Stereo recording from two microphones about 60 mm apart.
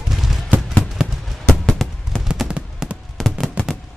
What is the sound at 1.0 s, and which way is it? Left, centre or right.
Fireworks, centre.